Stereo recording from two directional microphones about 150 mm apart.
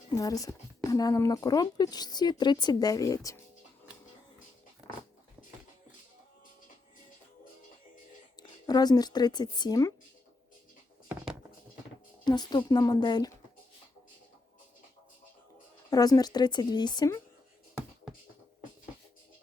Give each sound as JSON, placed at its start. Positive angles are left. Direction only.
{"t": 0.1, "sound": "speech", "side_deg": 25}
{"t": 8.4, "sound": "speech", "side_deg": 25}
{"t": 12.2, "sound": "speech", "side_deg": 30}
{"t": 15.9, "sound": "speech", "side_deg": 25}